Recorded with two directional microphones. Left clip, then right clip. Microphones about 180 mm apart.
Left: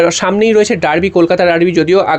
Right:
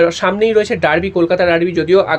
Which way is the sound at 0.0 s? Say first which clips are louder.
Left 2 dB; 40° left (ahead or behind).